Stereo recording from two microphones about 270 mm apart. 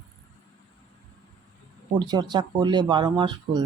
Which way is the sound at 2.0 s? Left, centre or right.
Centre.